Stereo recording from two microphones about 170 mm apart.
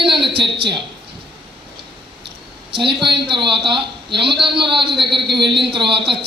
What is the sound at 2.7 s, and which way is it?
A man's voice, 30° right (ahead or behind).